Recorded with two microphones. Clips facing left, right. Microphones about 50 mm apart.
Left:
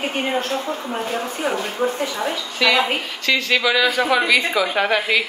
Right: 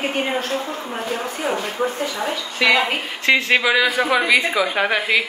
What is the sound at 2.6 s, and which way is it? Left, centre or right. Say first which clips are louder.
A woman's voice: right 1 dB; right.